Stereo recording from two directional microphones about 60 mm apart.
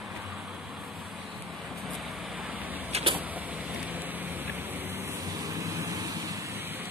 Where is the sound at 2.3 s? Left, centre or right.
Right.